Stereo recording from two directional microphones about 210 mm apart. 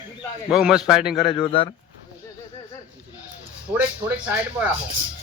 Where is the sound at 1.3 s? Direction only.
25° left (ahead or behind).